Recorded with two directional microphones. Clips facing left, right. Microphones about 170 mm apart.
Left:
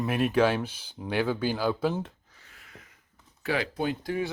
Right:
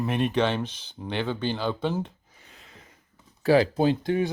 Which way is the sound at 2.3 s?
20° right (ahead or behind).